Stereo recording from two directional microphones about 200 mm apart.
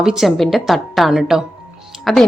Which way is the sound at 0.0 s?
Centre (ahead or behind).